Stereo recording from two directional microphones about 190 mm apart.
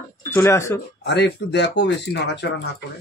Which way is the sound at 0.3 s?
15° left (ahead or behind).